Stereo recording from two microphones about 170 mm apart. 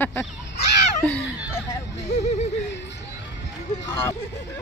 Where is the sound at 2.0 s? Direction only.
40° left (ahead or behind).